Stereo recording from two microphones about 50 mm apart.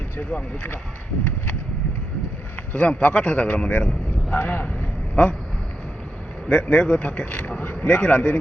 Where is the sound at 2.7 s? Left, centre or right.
Left.